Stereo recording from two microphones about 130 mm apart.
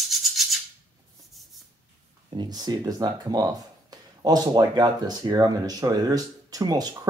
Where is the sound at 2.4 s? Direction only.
30° right (ahead or behind).